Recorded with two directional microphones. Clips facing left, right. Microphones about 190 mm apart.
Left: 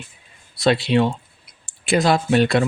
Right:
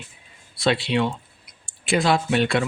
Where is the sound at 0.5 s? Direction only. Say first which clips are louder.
Left 4 dB; 40° left (ahead or behind).